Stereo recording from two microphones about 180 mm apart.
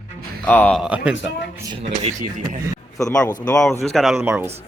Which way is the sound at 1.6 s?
30° right (ahead or behind).